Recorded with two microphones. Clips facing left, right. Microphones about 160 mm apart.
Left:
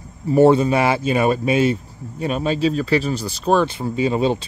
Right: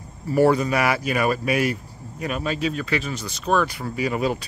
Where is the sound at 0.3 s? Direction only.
25° left (ahead or behind).